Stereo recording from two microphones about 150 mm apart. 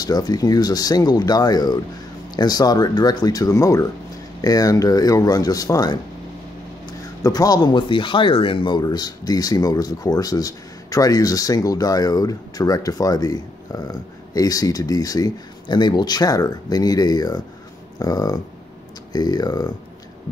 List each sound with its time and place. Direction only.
0.0 s speech: 25° left (ahead or behind)